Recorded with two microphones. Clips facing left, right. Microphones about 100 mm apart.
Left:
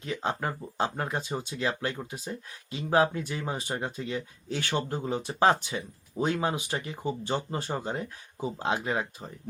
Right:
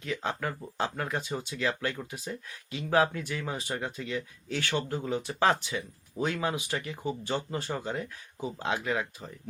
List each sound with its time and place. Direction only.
0.0 s speech: 25° left (ahead or behind)